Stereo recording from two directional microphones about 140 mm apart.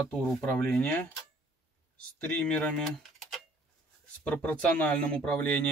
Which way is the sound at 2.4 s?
10° left (ahead or behind).